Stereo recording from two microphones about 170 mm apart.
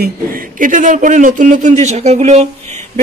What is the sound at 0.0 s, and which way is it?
Speech, 55° right (ahead or behind).